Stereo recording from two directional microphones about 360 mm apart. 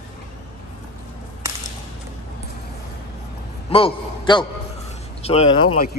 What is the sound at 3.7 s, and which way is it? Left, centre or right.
A man's voice, centre.